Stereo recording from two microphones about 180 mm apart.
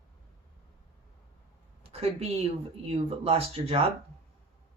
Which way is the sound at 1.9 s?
35° right (ahead or behind).